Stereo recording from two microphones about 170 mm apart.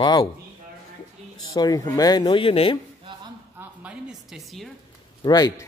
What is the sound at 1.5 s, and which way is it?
Speech, 20° left (ahead or behind).